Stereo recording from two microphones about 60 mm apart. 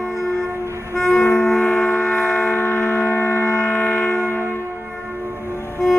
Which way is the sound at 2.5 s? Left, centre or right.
Left.